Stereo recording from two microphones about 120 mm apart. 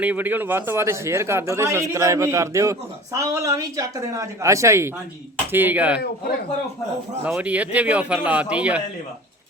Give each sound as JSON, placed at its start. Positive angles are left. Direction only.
{"t": 0.0, "sound": "a man's voice", "side_deg": -15}
{"t": 7.3, "sound": "a man's voice", "side_deg": -10}